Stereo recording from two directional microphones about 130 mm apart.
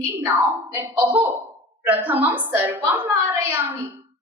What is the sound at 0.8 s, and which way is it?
A woman's voice, 15° right (ahead or behind).